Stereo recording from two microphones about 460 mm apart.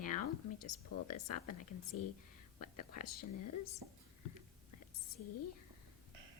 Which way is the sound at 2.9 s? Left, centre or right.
Left.